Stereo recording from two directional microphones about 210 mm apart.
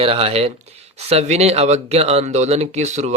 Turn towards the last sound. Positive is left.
turn(degrees=-35)  # may be behind; listen again after turning